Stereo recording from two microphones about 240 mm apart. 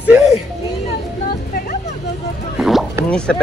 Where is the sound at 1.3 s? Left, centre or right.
Left.